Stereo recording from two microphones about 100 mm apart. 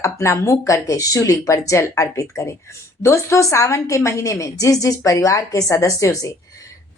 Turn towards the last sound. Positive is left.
turn(degrees=30)  # may be behind; listen again after turning